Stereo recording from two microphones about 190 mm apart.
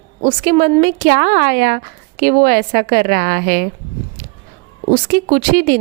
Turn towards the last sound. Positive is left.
turn(degrees=-50)  # may be behind; listen again after turning